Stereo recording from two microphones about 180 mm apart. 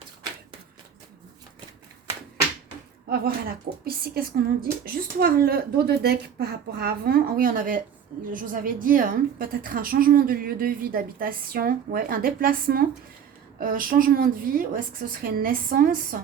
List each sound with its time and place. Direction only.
3.1 s a woman's voice: 55° right (ahead or behind)